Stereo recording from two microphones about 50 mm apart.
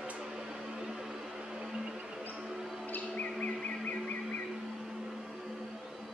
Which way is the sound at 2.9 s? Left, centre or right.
Left.